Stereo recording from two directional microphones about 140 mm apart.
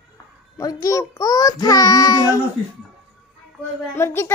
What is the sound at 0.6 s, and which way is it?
A child's voice, 25° left (ahead or behind).